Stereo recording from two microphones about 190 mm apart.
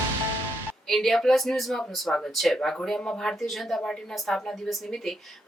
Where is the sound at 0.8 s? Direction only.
Centre (ahead or behind).